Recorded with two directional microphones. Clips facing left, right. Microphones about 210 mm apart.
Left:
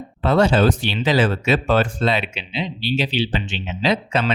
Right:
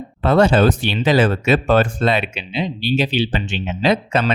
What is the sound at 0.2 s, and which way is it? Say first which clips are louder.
Speech: right 2 dB; 55° right (ahead or behind).